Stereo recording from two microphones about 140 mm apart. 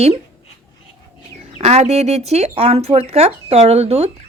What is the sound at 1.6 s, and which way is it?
Speech, 50° right (ahead or behind).